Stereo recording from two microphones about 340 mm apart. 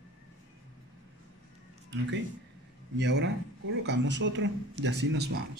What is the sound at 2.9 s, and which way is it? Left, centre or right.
Speech, right.